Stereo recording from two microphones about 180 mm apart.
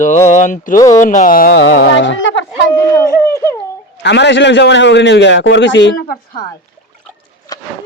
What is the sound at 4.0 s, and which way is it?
A man's voice, 75° left (ahead or behind).